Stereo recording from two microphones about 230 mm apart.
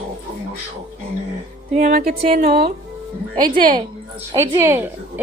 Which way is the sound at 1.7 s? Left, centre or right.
Right.